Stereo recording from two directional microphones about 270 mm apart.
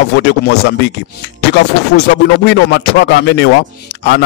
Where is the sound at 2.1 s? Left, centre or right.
Left.